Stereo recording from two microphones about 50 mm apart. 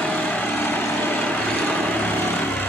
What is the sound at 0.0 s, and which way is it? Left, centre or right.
Vehicle, left.